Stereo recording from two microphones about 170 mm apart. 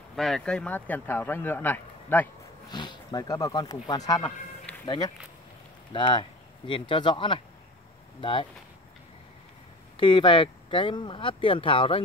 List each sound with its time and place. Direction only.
0.1 s speech: centre (ahead or behind)
2.7 s speech: 25° left (ahead or behind)
9.9 s speech: 30° left (ahead or behind)